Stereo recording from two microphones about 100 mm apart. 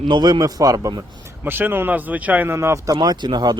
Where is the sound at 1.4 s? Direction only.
20° right (ahead or behind).